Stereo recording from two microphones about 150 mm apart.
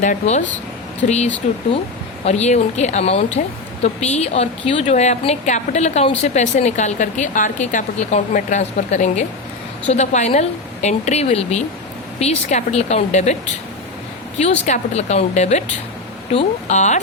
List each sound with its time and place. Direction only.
0.0 s a woman's voice: 55° left (ahead or behind)
14.3 s a woman's voice: 50° left (ahead or behind)